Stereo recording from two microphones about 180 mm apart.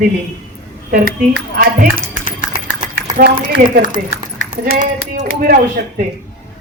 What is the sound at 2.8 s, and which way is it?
Speech, 50° right (ahead or behind).